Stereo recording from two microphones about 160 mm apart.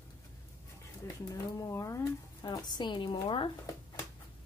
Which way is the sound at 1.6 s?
20° left (ahead or behind).